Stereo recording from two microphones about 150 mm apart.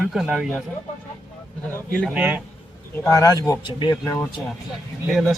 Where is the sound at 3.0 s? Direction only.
20° left (ahead or behind).